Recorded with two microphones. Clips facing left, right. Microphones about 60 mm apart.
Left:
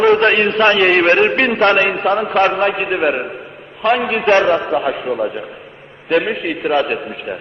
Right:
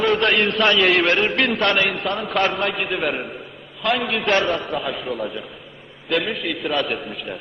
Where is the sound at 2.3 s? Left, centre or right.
Left.